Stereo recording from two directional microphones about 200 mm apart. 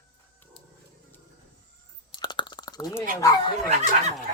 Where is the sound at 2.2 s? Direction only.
20° left (ahead or behind).